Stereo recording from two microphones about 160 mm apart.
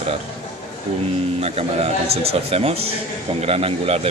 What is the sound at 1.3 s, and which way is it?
A man's voice, 40° right (ahead or behind).